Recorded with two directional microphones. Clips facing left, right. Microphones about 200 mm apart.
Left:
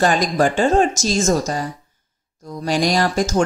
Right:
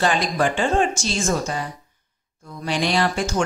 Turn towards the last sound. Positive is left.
turn(degrees=40)  # may be behind; listen again after turning